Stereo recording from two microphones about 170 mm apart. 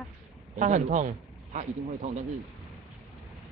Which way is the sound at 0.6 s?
45° right (ahead or behind).